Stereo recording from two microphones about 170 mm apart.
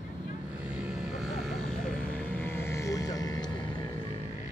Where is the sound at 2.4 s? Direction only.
15° left (ahead or behind).